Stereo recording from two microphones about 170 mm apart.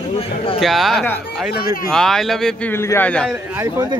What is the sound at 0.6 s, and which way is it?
Speech, centre (ahead or behind).